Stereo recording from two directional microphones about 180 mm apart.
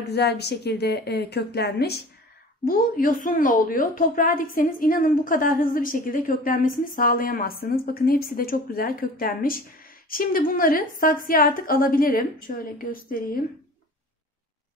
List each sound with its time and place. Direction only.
0.1 s a woman's voice: 70° left (ahead or behind)
2.6 s a woman's voice: 50° left (ahead or behind)